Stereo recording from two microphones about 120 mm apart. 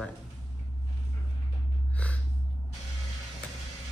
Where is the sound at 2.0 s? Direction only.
10° left (ahead or behind).